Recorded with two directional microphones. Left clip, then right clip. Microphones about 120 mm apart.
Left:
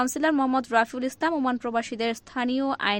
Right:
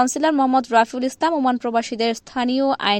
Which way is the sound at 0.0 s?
40° right (ahead or behind).